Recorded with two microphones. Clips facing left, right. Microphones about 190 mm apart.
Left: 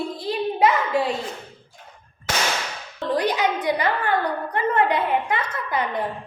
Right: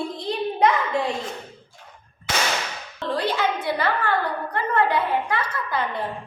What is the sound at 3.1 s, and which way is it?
A woman's voice, 15° left (ahead or behind).